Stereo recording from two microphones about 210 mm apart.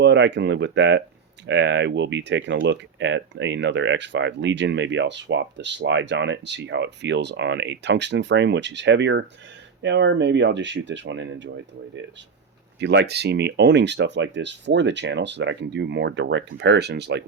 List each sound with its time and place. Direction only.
0.0 s speech: 55° right (ahead or behind)
12.8 s speech: 55° right (ahead or behind)